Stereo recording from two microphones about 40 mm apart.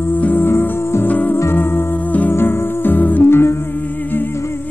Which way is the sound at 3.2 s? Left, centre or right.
Left.